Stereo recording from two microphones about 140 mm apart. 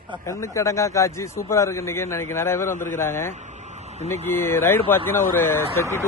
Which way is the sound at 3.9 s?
50° right (ahead or behind).